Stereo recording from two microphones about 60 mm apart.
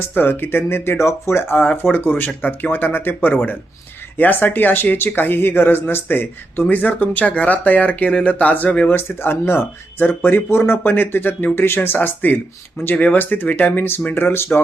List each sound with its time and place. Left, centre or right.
0.1 s speech: left
1.5 s speech: left
9.0 s speech: left
10.5 s speech: left
10.8 s speech: left